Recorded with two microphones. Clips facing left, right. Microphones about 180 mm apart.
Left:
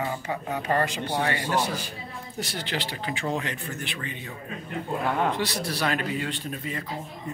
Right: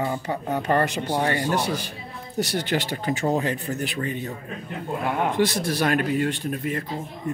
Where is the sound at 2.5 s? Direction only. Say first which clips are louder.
Right 5 dB; 45° right (ahead or behind).